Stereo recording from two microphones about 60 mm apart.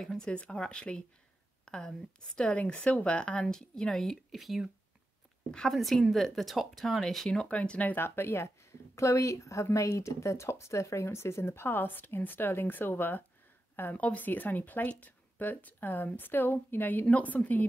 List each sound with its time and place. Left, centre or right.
0.0 s a woman's voice: centre
5.5 s a woman's voice: centre
5.8 s speech: centre
7.4 s speech: left
7.9 s a woman's voice: left